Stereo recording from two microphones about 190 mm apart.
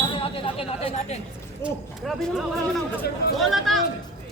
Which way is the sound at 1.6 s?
Centre (ahead or behind).